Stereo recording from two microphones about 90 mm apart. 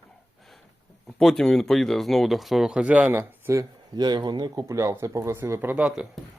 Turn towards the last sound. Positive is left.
turn(degrees=-10)  # may be behind; listen again after turning